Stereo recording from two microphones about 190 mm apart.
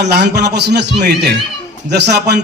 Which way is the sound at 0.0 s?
60° right (ahead or behind).